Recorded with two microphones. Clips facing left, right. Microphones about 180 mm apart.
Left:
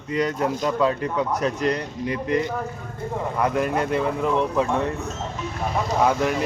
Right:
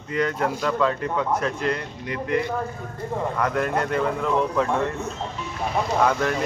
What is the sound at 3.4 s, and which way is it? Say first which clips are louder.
Speech: left 3 dB; 10° left (ahead or behind).